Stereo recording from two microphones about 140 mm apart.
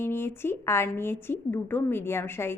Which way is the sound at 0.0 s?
15° left (ahead or behind).